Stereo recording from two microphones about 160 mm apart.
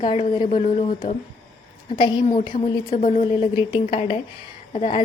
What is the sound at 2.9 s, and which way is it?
Speech, 45° left (ahead or behind).